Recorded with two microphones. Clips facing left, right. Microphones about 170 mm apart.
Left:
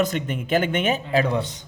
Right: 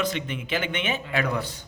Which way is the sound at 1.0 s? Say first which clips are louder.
Left 5 dB; 25° left (ahead or behind).